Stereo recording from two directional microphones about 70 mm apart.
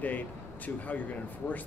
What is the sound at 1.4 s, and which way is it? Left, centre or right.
Speech, left.